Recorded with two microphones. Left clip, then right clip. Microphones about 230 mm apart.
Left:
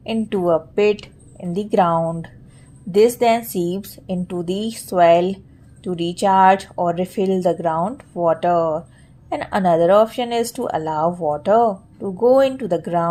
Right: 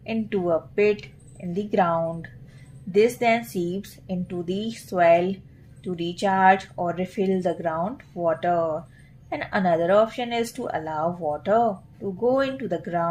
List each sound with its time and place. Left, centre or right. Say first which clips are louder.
0.0 s speech: left 6 dB; left